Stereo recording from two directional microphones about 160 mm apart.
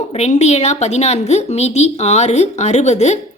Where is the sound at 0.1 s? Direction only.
45° left (ahead or behind).